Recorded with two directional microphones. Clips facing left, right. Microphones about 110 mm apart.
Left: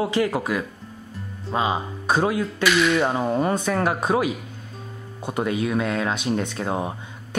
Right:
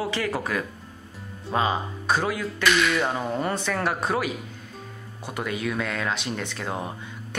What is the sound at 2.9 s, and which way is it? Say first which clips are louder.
Speech: left 4 dB; 25° left (ahead or behind).